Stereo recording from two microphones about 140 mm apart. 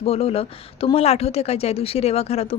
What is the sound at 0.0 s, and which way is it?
Speech, 45° left (ahead or behind).